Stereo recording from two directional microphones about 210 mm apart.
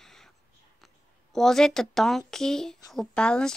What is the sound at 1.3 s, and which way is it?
Speech, centre (ahead or behind).